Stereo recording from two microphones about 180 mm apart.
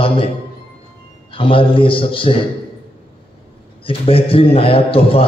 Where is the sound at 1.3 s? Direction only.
30° left (ahead or behind).